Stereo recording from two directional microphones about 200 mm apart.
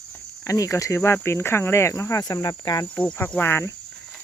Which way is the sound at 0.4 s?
15° left (ahead or behind).